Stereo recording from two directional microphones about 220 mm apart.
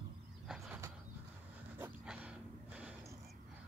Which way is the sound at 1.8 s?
5° right (ahead or behind).